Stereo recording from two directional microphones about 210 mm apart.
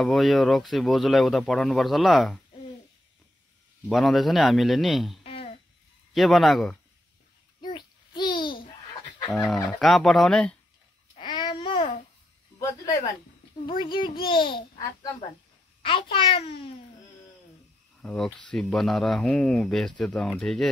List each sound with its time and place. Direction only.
0.0 s speech: centre (ahead or behind)
3.8 s speech: centre (ahead or behind)
5.2 s a sound: 25° left (ahead or behind)
6.1 s speech: centre (ahead or behind)
7.6 s babbling: 20° left (ahead or behind)
9.3 s speech: 5° left (ahead or behind)
11.1 s babbling: 20° left (ahead or behind)
12.5 s a sound: 15° left (ahead or behind)
13.7 s a child's voice: 25° left (ahead or behind)
18.0 s speech: 5° left (ahead or behind)